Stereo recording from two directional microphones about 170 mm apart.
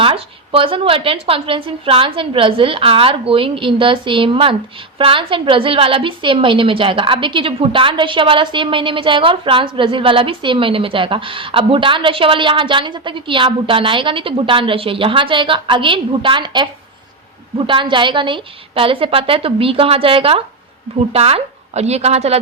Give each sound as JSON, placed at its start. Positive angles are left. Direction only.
{"t": 0.0, "sound": "a woman's voice", "side_deg": -30}
{"t": 17.7, "sound": "a woman's voice", "side_deg": -30}